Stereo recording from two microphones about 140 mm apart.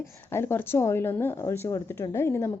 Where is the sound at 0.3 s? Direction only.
15° left (ahead or behind).